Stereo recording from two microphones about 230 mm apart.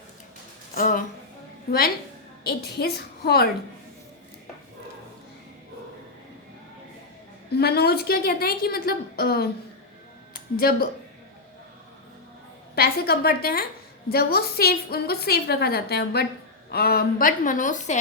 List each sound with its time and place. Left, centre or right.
0.8 s a woman's voice: left
2.4 s a woman's voice: left
7.5 s a woman's voice: left
12.7 s a woman's voice: left